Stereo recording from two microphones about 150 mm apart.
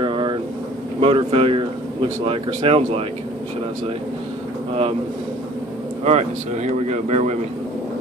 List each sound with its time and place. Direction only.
0.0 s air conditioning: 35° right (ahead or behind)
1.0 s speech: 35° right (ahead or behind)
6.0 s speech: 50° right (ahead or behind)